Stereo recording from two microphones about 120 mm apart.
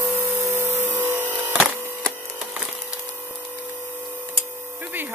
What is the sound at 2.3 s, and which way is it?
Wood, 10° right (ahead or behind).